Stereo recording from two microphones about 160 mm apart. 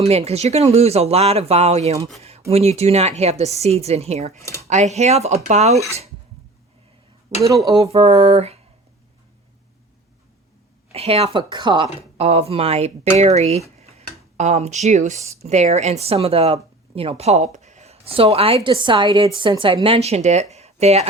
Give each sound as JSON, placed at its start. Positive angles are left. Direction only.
{"t": 0.0, "sound": "speech", "side_deg": -40}
{"t": 7.8, "sound": "speech", "side_deg": -40}
{"t": 10.9, "sound": "speech", "side_deg": -40}
{"t": 12.1, "sound": "speech", "side_deg": -40}